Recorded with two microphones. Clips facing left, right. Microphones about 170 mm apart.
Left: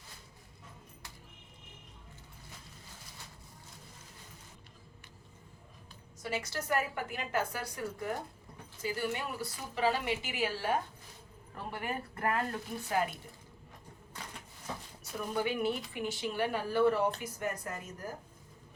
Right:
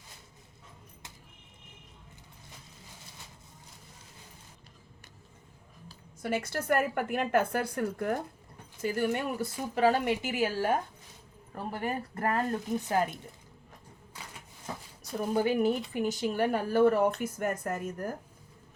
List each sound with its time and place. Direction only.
6.2 s a woman's voice: 55° right (ahead or behind)
15.1 s speech: 40° right (ahead or behind)